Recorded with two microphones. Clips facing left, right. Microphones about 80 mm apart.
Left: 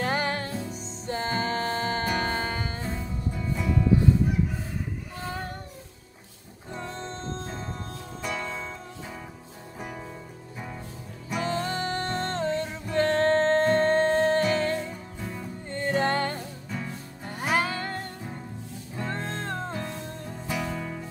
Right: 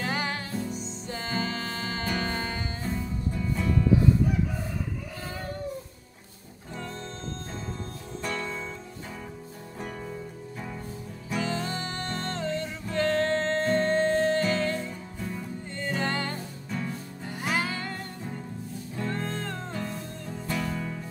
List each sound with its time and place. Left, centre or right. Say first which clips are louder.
0.0 s music: left 3 dB; left
2.8 s music: right 1 dB; centre
8.2 s music: even; centre
11.4 s music: left 6 dB; left
14.9 s music: right 1 dB; centre
15.7 s music: left 5 dB; left
16.7 s music: right 3 dB; centre
17.3 s music: left 3 dB; left
19.0 s music: even; left
19.7 s music: left 1 dB; centre